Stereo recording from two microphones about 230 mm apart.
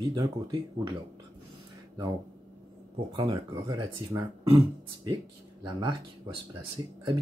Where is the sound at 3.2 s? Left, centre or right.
Centre.